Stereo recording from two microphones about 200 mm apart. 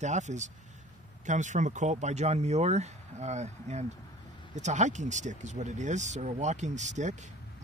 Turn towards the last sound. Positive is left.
turn(degrees=-35)  # may be behind; listen again after turning